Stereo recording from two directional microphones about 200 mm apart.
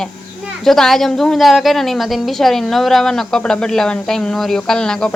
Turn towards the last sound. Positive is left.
turn(degrees=5)  # may be behind; listen again after turning